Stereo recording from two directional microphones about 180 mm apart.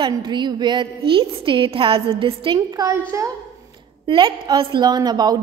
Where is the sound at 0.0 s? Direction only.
25° right (ahead or behind).